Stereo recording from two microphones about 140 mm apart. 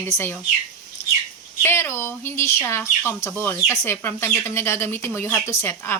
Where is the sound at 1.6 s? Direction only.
15° left (ahead or behind).